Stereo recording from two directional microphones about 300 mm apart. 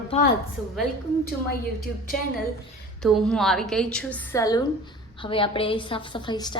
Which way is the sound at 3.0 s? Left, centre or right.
Centre.